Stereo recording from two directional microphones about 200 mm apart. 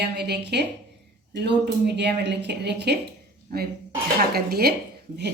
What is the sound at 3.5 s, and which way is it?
Speech, 45° right (ahead or behind).